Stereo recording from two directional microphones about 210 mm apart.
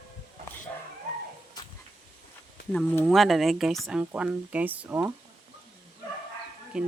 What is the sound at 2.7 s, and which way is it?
Speech, 5° left (ahead or behind).